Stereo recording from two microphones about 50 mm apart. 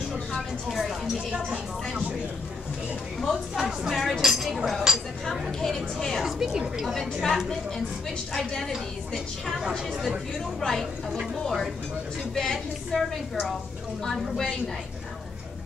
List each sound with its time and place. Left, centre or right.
0.7 s a woman's voice: centre
1.3 s speech: right
3.2 s a woman's voice: centre
6.2 s a woman's voice: centre
8.7 s a woman's voice: centre